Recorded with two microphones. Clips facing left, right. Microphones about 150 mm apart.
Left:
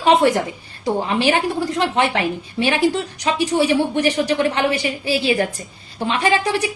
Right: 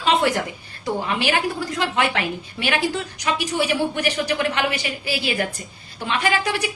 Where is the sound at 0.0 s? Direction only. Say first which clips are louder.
Left 5 dB; 25° left (ahead or behind).